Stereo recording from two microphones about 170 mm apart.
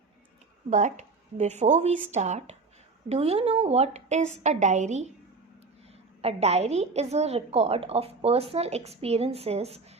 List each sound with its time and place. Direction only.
0.7 s a woman's voice: 45° right (ahead or behind)
6.2 s a woman's voice: 40° right (ahead or behind)